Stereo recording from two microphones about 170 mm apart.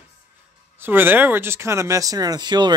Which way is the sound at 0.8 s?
10° right (ahead or behind).